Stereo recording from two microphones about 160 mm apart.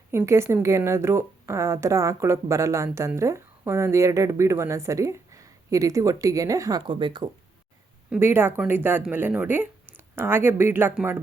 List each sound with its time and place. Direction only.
0.1 s a woman's voice: 15° right (ahead or behind)
8.1 s a woman's voice: 15° right (ahead or behind)